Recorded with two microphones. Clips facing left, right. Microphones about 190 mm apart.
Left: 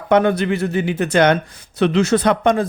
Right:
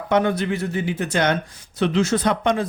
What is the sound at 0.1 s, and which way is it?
Speech, 60° left (ahead or behind).